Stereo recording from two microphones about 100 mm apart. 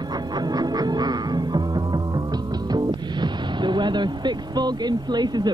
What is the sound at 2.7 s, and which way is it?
Speech, 45° right (ahead or behind).